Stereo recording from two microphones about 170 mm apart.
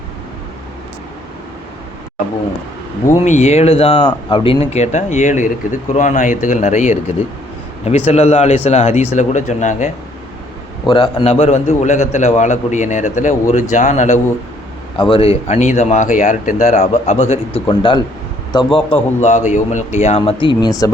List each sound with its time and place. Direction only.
3.2 s speech: 40° left (ahead or behind)
10.8 s speech: 35° left (ahead or behind)
14.9 s speech: 30° left (ahead or behind)
19.2 s speech: 45° left (ahead or behind); by 20.9 s 20° left (ahead or behind)